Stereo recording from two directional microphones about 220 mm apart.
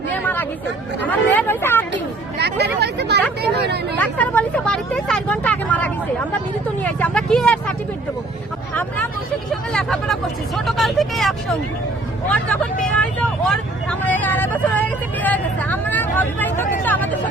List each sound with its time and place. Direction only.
0.1 s a sound: 10° left (ahead or behind)
1.0 s speech: 10° left (ahead or behind)
2.4 s speech: 50° right (ahead or behind)
3.9 s speech: 5° left (ahead or behind)
8.7 s speech: 5° left (ahead or behind)
12.8 s speech: 5° left (ahead or behind)
16.8 s vehicle: 5° left (ahead or behind)